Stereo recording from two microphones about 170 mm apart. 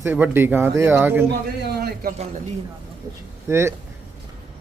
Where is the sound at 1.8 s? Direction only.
60° right (ahead or behind).